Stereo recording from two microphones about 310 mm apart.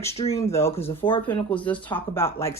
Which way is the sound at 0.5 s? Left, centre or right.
Centre.